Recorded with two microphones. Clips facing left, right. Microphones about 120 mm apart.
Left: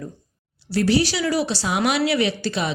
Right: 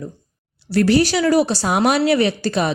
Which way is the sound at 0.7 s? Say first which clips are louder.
Right 4 dB; 55° right (ahead or behind).